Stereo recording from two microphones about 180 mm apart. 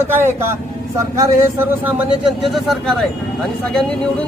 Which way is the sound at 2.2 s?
Centre (ahead or behind).